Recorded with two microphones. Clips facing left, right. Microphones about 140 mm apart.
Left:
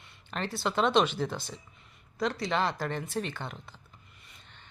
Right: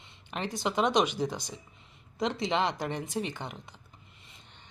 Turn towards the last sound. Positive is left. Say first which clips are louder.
# right 1 dB
turn(degrees=-15)  # may be behind; listen again after turning